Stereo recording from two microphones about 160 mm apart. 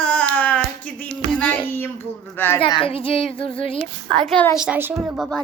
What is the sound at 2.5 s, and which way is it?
Speech, 30° left (ahead or behind).